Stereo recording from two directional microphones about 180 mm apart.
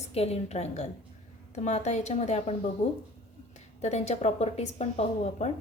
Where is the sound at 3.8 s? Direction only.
40° left (ahead or behind).